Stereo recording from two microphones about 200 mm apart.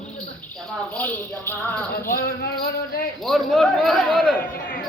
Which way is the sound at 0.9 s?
10° left (ahead or behind).